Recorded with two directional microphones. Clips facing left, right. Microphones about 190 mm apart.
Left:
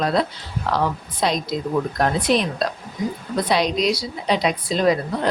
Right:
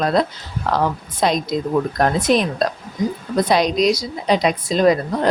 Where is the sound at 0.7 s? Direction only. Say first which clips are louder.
Right 2 dB; 50° right (ahead or behind).